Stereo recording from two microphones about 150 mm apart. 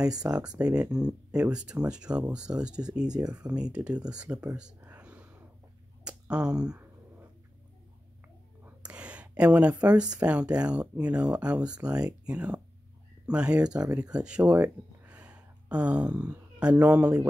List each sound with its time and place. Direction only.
0.3 s speech: 5° right (ahead or behind)
0.8 s speech: 25° right (ahead or behind)
1.3 s speech: 5° right (ahead or behind)
3.1 s speech: 25° right (ahead or behind)
3.7 s speech: 5° right (ahead or behind)
4.7 s a sound: 10° right (ahead or behind)
6.0 s speech: 5° right (ahead or behind)
8.6 s a sound: 10° right (ahead or behind)
9.8 s speech: 5° right (ahead or behind)